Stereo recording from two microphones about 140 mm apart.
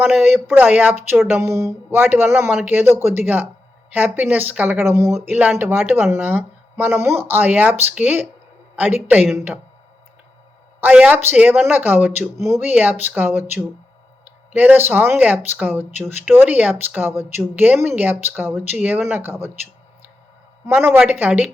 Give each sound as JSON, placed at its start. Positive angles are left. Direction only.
{"t": 0.0, "sound": "speech", "side_deg": -5}
{"t": 8.7, "sound": "a sound", "side_deg": -10}
{"t": 9.0, "sound": "speech", "side_deg": -10}
{"t": 10.8, "sound": "speech", "side_deg": -10}
{"t": 20.7, "sound": "speech", "side_deg": -15}